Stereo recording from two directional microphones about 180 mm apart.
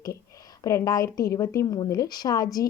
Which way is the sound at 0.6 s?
15° left (ahead or behind).